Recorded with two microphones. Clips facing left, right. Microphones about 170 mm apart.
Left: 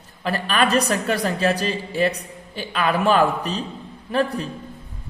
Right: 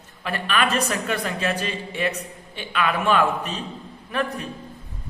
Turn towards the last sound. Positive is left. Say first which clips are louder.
# left 5 dB
turn(degrees=30)  # may be behind; listen again after turning